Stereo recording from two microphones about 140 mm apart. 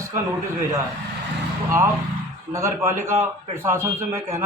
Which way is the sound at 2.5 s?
20° right (ahead or behind).